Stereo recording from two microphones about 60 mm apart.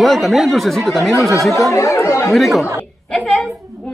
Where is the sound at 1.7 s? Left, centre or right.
Left.